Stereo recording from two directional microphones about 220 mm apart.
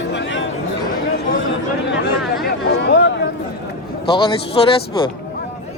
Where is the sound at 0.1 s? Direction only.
55° left (ahead or behind).